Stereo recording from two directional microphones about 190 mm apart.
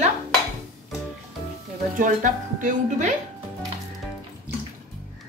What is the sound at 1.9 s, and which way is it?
Speech, 40° right (ahead or behind).